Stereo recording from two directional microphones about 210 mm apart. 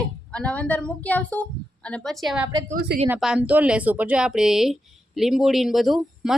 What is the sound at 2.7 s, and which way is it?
Speech, 45° right (ahead or behind).